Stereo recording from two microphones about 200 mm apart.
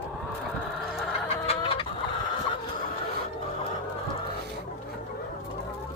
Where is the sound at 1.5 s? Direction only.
25° left (ahead or behind).